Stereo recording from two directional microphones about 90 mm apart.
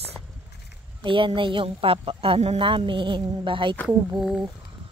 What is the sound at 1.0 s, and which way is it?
Speech, 70° right (ahead or behind).